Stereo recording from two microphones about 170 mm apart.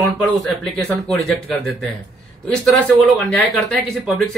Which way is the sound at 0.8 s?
5° left (ahead or behind).